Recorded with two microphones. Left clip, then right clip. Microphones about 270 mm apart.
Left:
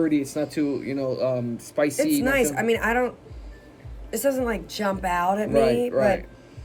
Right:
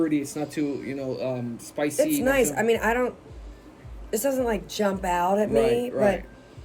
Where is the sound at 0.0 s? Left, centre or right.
Centre.